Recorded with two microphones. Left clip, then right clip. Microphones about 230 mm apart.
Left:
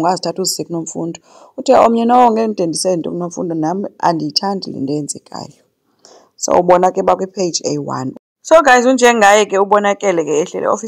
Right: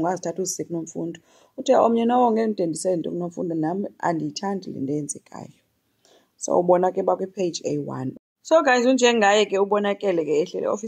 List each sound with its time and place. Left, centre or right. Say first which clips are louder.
0.0 s a woman's voice: left 9 dB; left